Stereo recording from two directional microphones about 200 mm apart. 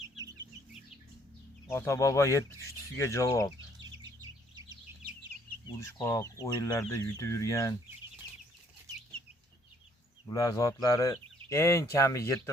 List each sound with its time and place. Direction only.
1.6 s speech: 15° left (ahead or behind)
5.6 s speech: 15° left (ahead or behind)
10.2 s speech: 20° left (ahead or behind)